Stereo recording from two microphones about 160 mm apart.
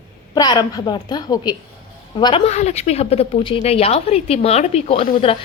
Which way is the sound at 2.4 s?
45° left (ahead or behind).